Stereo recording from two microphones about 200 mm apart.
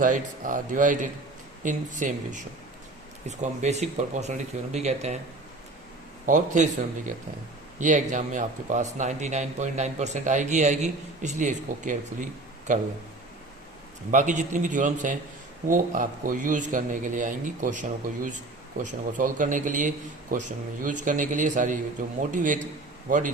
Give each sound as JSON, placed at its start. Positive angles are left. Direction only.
{"t": 0.0, "sound": "speech", "side_deg": -40}
{"t": 6.2, "sound": "speech", "side_deg": -35}
{"t": 14.1, "sound": "speech", "side_deg": -40}